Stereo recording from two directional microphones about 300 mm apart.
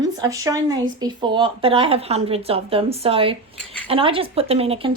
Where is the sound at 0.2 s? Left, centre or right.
Centre.